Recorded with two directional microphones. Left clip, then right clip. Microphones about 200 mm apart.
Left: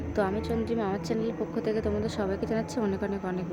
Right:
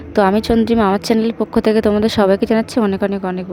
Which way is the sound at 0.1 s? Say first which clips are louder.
Right 15 dB; 45° right (ahead or behind).